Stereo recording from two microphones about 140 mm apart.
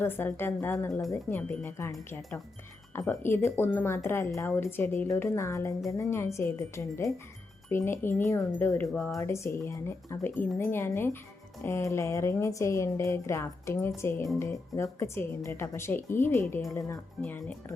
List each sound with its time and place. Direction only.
0.0 s a woman's voice: 15° left (ahead or behind)
9.1 s a woman's voice: 20° left (ahead or behind)